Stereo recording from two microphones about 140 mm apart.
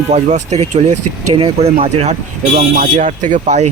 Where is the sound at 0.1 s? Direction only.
55° right (ahead or behind).